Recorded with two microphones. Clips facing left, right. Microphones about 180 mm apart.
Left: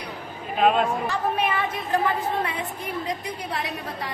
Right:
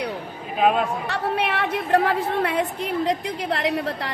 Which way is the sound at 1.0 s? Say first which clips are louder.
Even; 70° right (ahead or behind).